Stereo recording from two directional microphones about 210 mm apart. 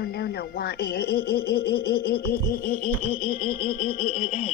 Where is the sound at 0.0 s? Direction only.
45° left (ahead or behind).